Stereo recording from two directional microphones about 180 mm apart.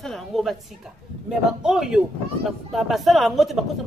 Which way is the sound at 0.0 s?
Centre (ahead or behind).